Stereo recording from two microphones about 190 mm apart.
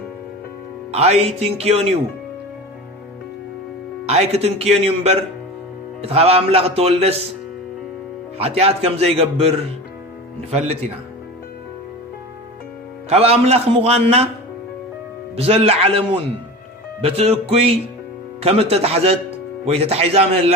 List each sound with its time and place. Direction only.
0.9 s speech: 35° right (ahead or behind)
4.0 s speech: 35° right (ahead or behind)
8.4 s speech: 30° right (ahead or behind)
13.1 s speech: 30° right (ahead or behind)
15.4 s speech: 30° right (ahead or behind)
18.4 s speech: 30° right (ahead or behind)